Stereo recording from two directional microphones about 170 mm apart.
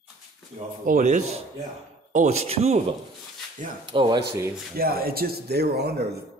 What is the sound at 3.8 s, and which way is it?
Speech, 25° right (ahead or behind).